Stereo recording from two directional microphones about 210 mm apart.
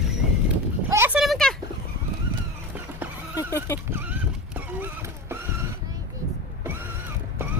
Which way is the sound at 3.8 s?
10° right (ahead or behind).